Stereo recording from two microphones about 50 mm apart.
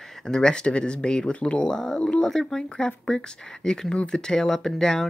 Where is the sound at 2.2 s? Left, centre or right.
Centre.